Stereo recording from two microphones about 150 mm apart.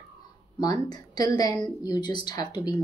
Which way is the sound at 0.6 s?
25° left (ahead or behind).